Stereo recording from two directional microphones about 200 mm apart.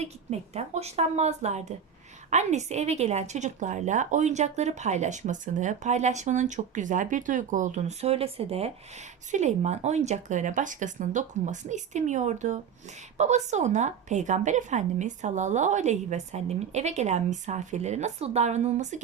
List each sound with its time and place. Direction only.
0.0 s a woman's voice: 35° right (ahead or behind)